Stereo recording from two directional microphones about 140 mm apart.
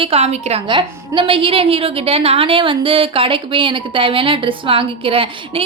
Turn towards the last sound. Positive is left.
turn(degrees=-40)  # may be behind; listen again after turning